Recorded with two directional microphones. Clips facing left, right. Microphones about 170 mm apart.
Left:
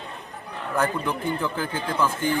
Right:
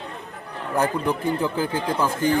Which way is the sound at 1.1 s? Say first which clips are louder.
Right 3 dB; 35° right (ahead or behind).